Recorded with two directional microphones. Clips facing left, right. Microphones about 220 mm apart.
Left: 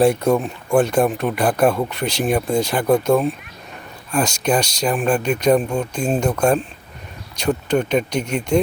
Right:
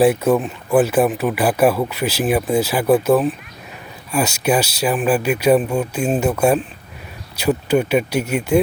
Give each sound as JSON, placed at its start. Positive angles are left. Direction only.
{"t": 0.0, "sound": "speech", "side_deg": -5}